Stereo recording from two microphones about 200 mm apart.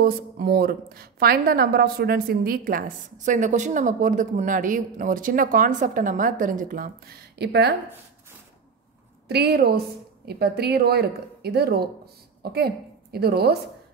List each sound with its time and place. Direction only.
0.0 s a woman's voice: 50° right (ahead or behind)
9.3 s a woman's voice: 55° right (ahead or behind)